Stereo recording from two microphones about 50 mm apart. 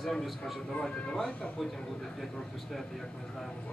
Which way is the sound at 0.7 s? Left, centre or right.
Centre.